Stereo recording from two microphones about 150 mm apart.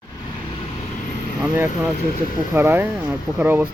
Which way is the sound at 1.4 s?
15° right (ahead or behind).